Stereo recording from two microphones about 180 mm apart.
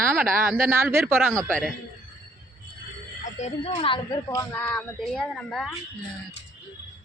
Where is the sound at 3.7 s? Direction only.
30° left (ahead or behind).